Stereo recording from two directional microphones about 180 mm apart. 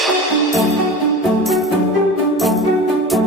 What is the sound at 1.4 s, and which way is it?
Music, centre (ahead or behind).